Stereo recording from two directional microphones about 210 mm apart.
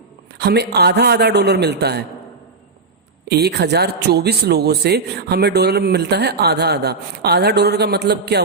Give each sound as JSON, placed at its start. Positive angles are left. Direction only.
{"t": 0.3, "sound": "a man's voice", "side_deg": -50}
{"t": 3.2, "sound": "a man's voice", "side_deg": -50}